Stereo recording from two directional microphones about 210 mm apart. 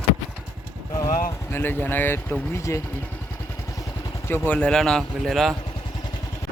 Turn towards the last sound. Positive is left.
turn(degrees=0)  # may be behind; listen again after turning